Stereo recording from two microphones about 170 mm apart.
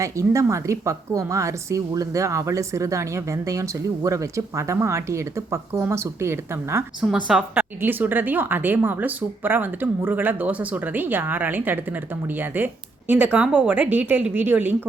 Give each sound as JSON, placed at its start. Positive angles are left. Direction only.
{"t": 0.0, "sound": "a woman's voice", "side_deg": -20}